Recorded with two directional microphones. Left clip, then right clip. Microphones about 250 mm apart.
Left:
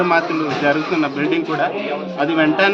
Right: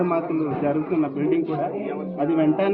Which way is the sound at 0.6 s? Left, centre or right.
Left.